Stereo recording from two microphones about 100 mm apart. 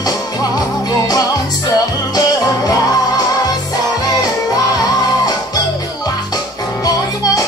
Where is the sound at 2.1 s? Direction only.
40° left (ahead or behind).